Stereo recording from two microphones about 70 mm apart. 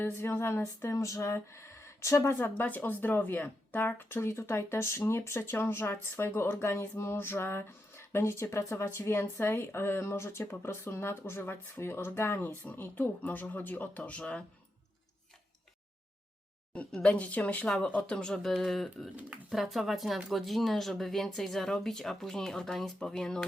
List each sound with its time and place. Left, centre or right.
0.2 s speech: left
2.3 s speech: left
16.9 s speech: centre